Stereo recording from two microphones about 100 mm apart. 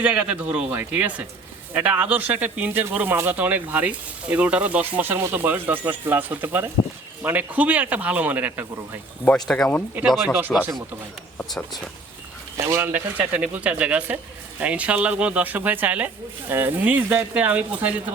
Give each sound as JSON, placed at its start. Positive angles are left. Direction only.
{"t": 0.0, "sound": "speech", "side_deg": -15}
{"t": 9.2, "sound": "speech", "side_deg": 10}
{"t": 12.6, "sound": "speech", "side_deg": -30}
{"t": 12.9, "sound": "speech", "side_deg": -15}